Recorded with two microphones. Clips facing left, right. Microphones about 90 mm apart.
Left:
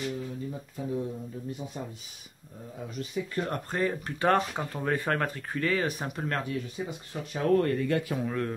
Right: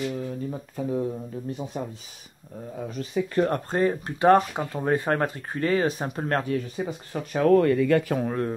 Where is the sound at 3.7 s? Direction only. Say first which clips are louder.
Right 6 dB; 30° right (ahead or behind).